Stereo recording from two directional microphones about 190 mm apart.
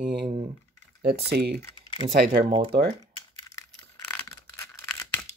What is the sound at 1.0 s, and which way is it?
Speech, 55° right (ahead or behind).